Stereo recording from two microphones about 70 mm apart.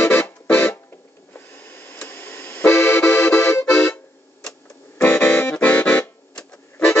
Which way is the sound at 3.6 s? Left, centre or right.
Centre.